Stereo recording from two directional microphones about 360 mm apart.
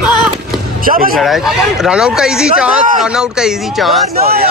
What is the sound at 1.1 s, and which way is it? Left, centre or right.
Speech, centre.